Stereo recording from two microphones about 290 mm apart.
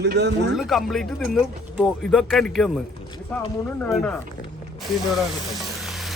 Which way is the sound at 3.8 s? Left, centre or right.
Centre.